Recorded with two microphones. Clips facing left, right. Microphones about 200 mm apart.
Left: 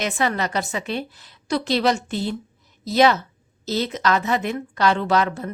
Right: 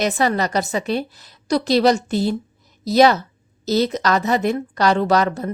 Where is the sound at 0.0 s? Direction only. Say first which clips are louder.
Right 4 dB; 40° right (ahead or behind).